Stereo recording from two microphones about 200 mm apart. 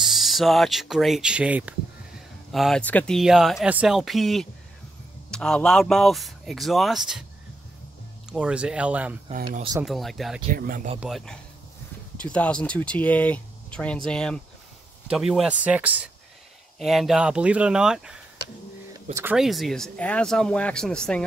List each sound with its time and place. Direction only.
0.0 s speech: centre (ahead or behind)
8.3 s speech: 5° right (ahead or behind)
9.3 s speech: 40° right (ahead or behind)
9.8 s speech: centre (ahead or behind)
10.5 s speech: 45° right (ahead or behind)
11.0 s speech: centre (ahead or behind)
18.9 s speech: 15° right (ahead or behind)
19.3 s speech: centre (ahead or behind)